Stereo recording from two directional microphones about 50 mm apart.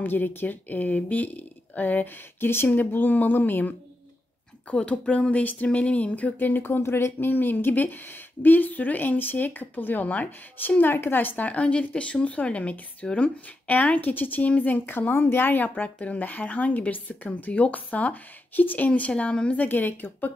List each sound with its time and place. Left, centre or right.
0.0 s speech: left
4.6 s speech: left
6.3 s speech: left
10.9 s speech: left
18.9 s speech: left
19.6 s speech: left